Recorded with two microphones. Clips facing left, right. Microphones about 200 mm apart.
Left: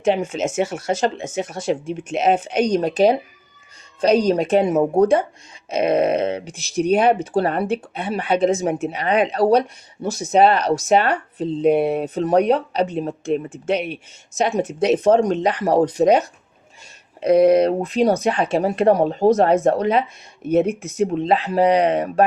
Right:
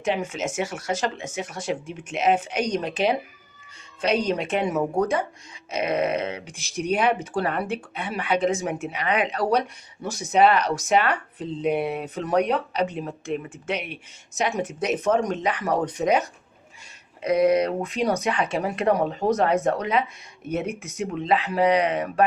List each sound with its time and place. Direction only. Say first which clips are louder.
0.3 s speech: left 6 dB; 25° left (ahead or behind)
4.7 s speech: left 8 dB; 25° left (ahead or behind)